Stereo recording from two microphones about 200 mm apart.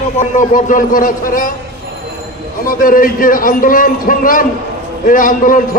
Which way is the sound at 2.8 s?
45° left (ahead or behind).